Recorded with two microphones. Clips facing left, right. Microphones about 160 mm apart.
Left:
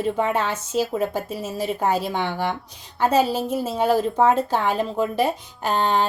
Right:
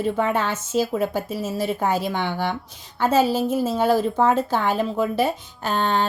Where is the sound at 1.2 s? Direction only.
10° right (ahead or behind).